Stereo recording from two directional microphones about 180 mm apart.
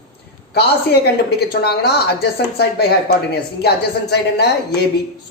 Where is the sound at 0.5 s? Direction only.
65° left (ahead or behind).